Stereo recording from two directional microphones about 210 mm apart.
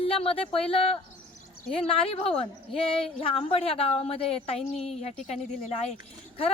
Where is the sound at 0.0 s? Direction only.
25° left (ahead or behind).